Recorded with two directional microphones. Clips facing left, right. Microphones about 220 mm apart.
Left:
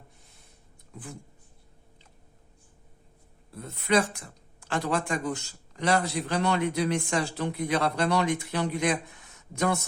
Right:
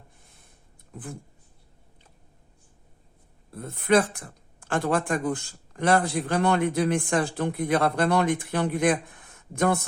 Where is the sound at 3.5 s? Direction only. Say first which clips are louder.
Right 4 dB; 50° right (ahead or behind).